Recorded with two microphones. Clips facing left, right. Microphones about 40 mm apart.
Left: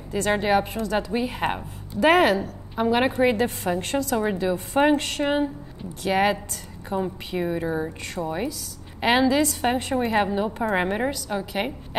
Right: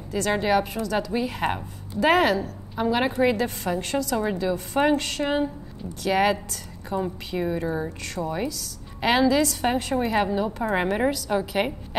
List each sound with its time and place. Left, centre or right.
0.1 s a woman's voice: centre
2.0 s a woman's voice: left
10.6 s a woman's voice: centre